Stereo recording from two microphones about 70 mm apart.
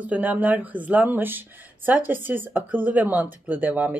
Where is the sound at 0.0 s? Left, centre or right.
Right.